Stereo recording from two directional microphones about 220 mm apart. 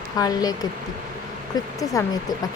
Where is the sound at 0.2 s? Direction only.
15° left (ahead or behind).